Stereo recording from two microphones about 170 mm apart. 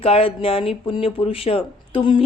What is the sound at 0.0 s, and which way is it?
Speech, 35° left (ahead or behind).